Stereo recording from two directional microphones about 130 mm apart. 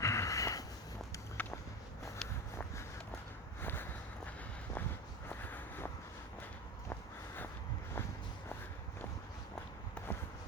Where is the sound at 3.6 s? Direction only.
15° left (ahead or behind).